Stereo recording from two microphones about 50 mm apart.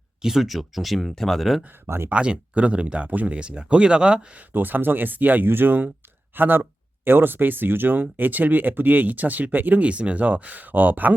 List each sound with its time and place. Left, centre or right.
0.2 s speech: centre
2.0 s speech: right
4.5 s speech: right